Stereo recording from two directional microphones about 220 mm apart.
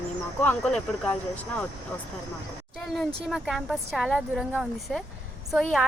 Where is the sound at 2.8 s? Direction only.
Centre (ahead or behind).